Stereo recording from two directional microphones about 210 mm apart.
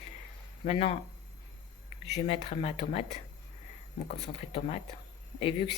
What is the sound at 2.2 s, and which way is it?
Speech, 30° left (ahead or behind).